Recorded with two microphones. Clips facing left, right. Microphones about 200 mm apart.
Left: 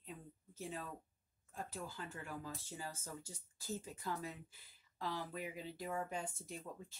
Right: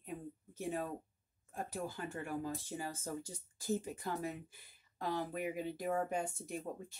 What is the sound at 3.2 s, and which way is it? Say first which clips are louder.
Speech: right 7 dB; 15° right (ahead or behind).